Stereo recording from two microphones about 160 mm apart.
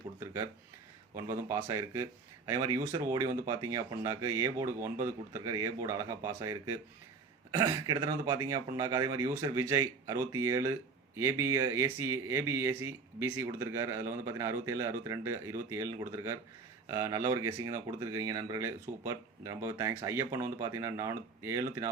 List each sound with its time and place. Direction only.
1.1 s speech: 20° right (ahead or behind)